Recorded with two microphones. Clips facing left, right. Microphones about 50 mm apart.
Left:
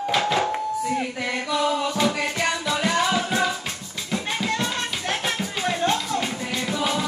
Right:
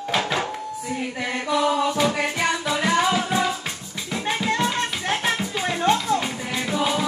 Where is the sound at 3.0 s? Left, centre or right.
Centre.